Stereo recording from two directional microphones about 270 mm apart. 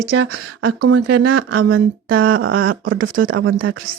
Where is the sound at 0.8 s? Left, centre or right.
Right.